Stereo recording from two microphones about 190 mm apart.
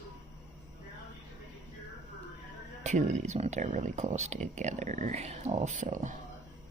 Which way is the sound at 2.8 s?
40° right (ahead or behind).